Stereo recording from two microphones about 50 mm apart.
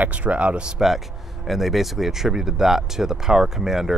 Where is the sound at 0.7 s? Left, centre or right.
Centre.